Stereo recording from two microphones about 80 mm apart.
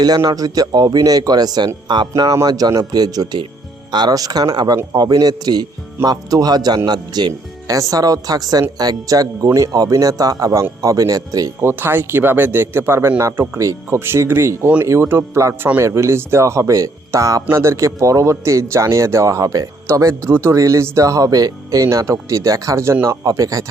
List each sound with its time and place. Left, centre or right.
0.3 s a man's voice: right
2.3 s a man's voice: right
7.7 s a man's voice: right
11.6 s a man's voice: right
13.6 s speech: right
14.0 s a man's voice: right
21.8 s speech: right
23.2 s a man's voice: right